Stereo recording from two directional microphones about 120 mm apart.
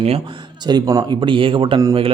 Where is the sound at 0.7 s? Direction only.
30° right (ahead or behind).